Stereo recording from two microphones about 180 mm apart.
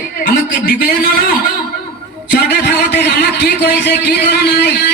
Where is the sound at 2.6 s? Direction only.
70° left (ahead or behind).